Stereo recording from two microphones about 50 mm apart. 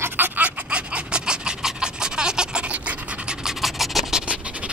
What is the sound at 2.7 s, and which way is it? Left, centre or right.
Pant, right.